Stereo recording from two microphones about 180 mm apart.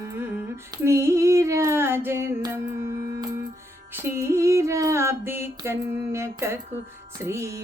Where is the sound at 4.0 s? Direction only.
15° right (ahead or behind).